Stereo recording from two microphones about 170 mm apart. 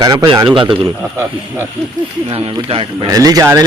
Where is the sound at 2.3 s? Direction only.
35° right (ahead or behind).